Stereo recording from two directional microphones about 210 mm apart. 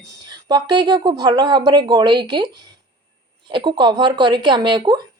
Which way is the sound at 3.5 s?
20° right (ahead or behind).